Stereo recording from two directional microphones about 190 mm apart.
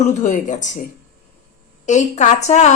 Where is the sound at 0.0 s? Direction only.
40° left (ahead or behind).